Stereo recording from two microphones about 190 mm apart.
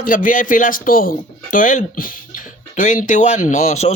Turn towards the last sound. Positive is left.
turn(degrees=40)  # may be behind; listen again after turning